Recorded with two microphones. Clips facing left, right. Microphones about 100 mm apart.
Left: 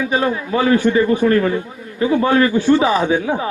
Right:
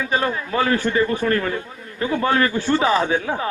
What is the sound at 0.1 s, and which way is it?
A man's voice, 25° left (ahead or behind).